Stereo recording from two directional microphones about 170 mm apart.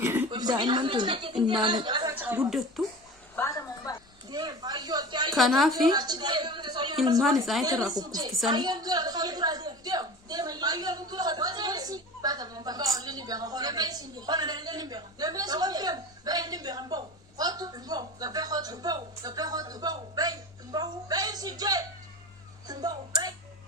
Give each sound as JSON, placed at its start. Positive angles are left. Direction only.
{"t": 0.0, "sound": "a sound", "side_deg": -15}
{"t": 0.3, "sound": "a woman's voice", "side_deg": -25}
{"t": 2.1, "sound": "speech", "side_deg": -10}
{"t": 3.3, "sound": "a sound", "side_deg": 20}
{"t": 4.3, "sound": "speech", "side_deg": -25}
{"t": 5.3, "sound": "speech", "side_deg": 0}
{"t": 5.9, "sound": "a woman's voice", "side_deg": -25}
{"t": 7.2, "sound": "speech", "side_deg": 0}
{"t": 7.6, "sound": "a woman's voice", "side_deg": -20}